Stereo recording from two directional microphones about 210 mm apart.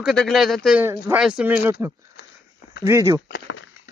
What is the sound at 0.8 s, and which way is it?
Speech, 10° right (ahead or behind).